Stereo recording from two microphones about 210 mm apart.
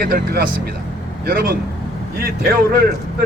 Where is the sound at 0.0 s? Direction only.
45° right (ahead or behind).